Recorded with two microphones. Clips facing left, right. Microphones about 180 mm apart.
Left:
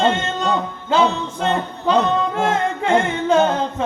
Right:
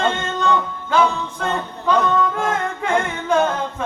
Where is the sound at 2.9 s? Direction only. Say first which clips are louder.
Left 2 dB; 20° left (ahead or behind).